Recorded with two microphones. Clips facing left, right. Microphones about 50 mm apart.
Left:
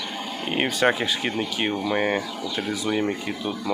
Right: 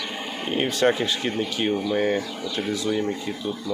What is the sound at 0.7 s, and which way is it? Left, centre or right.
Speech, centre.